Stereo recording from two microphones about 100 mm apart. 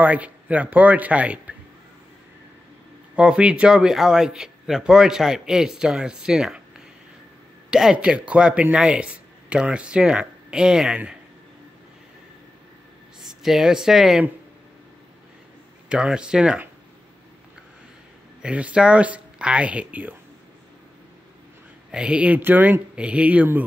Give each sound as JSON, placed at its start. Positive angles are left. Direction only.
{"t": 0.0, "sound": "speech", "side_deg": -15}
{"t": 3.2, "sound": "a man's voice", "side_deg": -10}
{"t": 7.7, "sound": "speech", "side_deg": -5}
{"t": 13.4, "sound": "a man's voice", "side_deg": -5}
{"t": 15.9, "sound": "speech", "side_deg": -10}
{"t": 18.4, "sound": "speech", "side_deg": -10}
{"t": 21.9, "sound": "speech", "side_deg": -10}